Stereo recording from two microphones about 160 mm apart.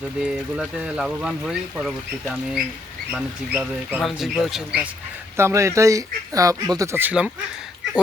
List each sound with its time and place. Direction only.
0.2 s speech: 5° right (ahead or behind)
3.1 s speech: 10° right (ahead or behind)
5.4 s speech: 20° right (ahead or behind)